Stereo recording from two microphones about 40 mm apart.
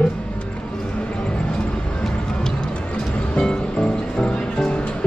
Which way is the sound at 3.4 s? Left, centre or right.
Centre.